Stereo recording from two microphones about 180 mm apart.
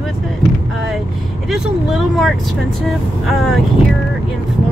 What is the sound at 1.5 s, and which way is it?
Speech, centre (ahead or behind).